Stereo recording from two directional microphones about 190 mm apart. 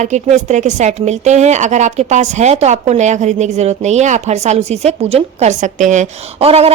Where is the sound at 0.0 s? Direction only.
40° right (ahead or behind).